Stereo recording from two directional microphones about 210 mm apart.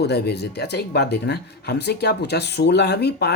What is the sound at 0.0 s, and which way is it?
Speech, 50° left (ahead or behind).